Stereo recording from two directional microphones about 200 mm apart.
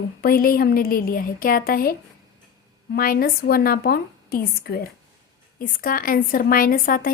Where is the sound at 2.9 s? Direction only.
50° left (ahead or behind).